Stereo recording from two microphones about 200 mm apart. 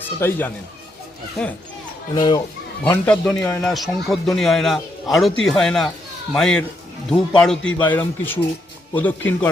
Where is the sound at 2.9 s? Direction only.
5° left (ahead or behind).